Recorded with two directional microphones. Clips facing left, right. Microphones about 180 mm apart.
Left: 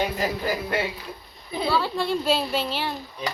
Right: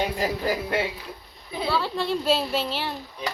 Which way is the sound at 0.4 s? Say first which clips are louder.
Right 1 dB; 25° right (ahead or behind).